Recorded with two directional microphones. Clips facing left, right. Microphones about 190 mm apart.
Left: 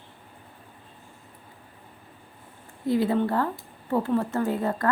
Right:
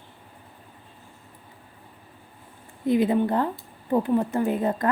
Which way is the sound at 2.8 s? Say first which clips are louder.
Right 2 dB; 20° right (ahead or behind).